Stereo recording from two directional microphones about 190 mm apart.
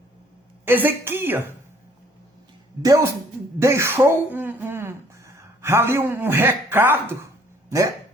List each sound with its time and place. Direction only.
0.6 s a woman's voice: 10° right (ahead or behind)
2.8 s a woman's voice: 15° right (ahead or behind)